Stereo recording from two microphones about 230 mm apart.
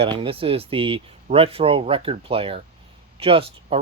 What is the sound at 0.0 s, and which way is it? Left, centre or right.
Speech, right.